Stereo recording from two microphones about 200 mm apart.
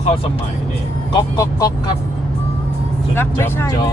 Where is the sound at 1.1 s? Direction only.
20° left (ahead or behind).